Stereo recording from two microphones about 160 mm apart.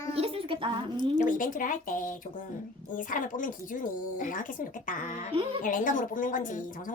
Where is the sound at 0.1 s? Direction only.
35° right (ahead or behind).